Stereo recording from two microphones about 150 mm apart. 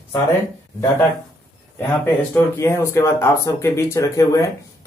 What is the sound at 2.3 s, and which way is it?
Speech, 15° left (ahead or behind).